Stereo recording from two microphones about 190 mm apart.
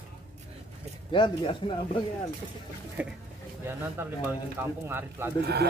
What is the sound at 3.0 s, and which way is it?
Speech, 5° right (ahead or behind).